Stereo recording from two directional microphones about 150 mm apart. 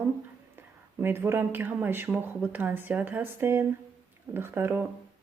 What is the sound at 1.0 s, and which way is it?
Speech, 15° right (ahead or behind).